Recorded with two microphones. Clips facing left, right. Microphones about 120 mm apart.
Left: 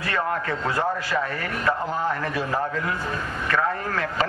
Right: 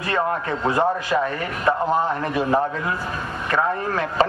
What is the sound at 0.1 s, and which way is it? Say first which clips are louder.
Speech: right 4 dB; 20° right (ahead or behind).